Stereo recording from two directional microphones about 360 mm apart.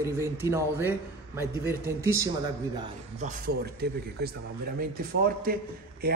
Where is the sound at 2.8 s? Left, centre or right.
Centre.